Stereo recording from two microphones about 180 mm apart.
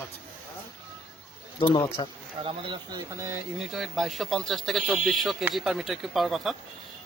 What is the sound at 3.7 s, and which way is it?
Speech, centre (ahead or behind).